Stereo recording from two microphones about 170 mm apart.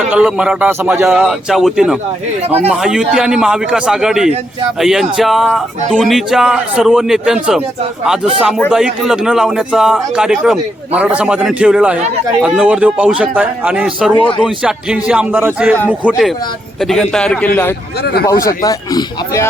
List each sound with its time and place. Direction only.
0.1 s a man's voice: 5° right (ahead or behind)
1.1 s a man's voice: 5° right (ahead or behind)
18.0 s speech: 65° left (ahead or behind)
18.3 s speech: 20° left (ahead or behind)